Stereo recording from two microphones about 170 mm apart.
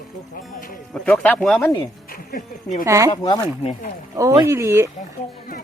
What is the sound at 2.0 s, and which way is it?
Music, 60° left (ahead or behind).